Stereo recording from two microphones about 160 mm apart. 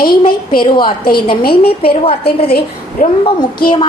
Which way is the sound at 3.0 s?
55° left (ahead or behind).